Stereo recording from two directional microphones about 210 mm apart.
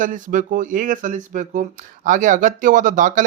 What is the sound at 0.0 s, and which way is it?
Speech, 40° right (ahead or behind).